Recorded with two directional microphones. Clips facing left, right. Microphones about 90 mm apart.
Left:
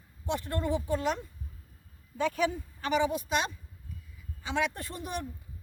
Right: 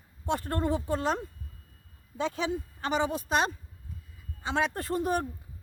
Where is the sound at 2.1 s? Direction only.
25° right (ahead or behind).